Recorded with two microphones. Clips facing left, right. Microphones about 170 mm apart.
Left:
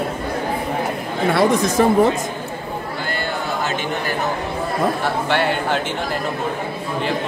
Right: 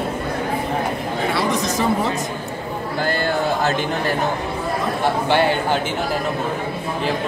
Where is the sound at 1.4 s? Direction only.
55° left (ahead or behind).